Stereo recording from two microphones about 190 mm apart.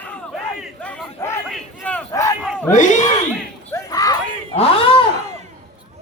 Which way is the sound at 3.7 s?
15° left (ahead or behind).